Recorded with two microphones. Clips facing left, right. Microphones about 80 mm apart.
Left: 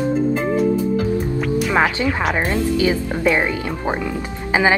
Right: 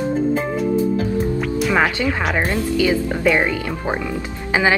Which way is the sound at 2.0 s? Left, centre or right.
Left.